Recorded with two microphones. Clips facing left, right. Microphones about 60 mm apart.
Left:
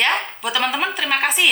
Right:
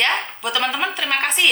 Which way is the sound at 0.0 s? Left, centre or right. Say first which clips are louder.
Left 1 dB; centre.